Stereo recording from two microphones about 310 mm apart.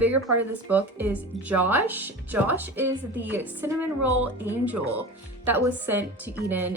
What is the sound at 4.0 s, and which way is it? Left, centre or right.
Speech, right.